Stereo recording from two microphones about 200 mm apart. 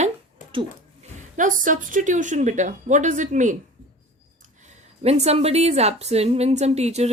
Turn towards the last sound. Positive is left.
turn(degrees=-30)  # may be behind; listen again after turning